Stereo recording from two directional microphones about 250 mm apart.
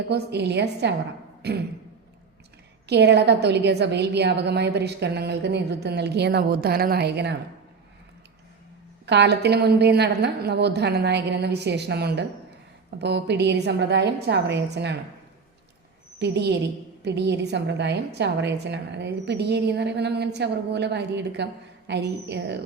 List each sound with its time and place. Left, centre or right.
0.1 s a woman's voice: right
1.4 s a sound: right
2.8 s a woman's voice: right
9.0 s a woman's voice: right
16.1 s a woman's voice: right